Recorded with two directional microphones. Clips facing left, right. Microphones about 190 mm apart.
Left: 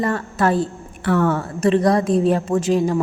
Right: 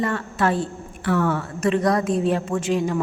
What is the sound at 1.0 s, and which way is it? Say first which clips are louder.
Speech: left 3 dB; 55° left (ahead or behind).